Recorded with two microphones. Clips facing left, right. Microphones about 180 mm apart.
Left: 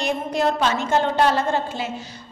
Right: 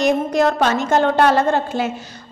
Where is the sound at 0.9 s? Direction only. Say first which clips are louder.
Right 4 dB; 60° right (ahead or behind).